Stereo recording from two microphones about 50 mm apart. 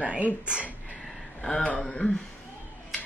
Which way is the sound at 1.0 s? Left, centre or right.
Centre.